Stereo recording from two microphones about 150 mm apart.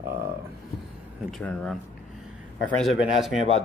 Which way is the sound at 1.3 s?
5° left (ahead or behind).